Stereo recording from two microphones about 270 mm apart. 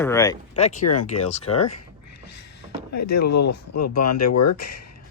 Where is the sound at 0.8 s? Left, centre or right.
Left.